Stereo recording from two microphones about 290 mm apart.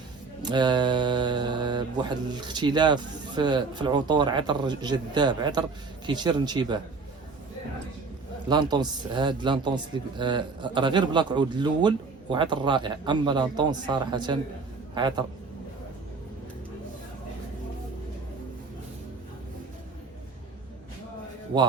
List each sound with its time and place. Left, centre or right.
0.4 s speech: centre
8.4 s a man's voice: centre